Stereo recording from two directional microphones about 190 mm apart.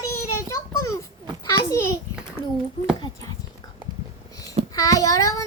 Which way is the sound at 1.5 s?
15° left (ahead or behind).